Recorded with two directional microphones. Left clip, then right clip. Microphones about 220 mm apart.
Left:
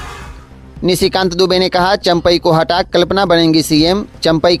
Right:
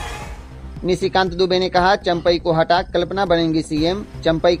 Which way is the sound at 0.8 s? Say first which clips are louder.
Left 5 dB; 35° left (ahead or behind).